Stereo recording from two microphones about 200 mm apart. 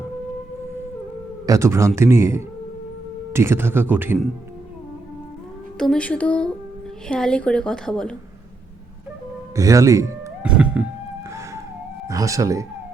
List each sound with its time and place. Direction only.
1.5 s speech: 15° right (ahead or behind)
5.8 s a woman's voice: 5° left (ahead or behind)
9.6 s speech: 15° right (ahead or behind)
10.4 s a sound: 5° right (ahead or behind)
12.0 s speech: 15° right (ahead or behind)